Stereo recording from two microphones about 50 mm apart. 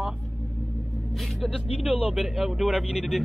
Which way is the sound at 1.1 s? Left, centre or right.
Centre.